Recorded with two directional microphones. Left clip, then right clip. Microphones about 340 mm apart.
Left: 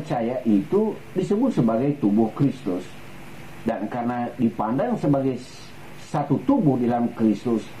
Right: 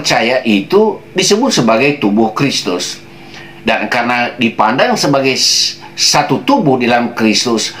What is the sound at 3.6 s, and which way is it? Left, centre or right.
Speech, centre.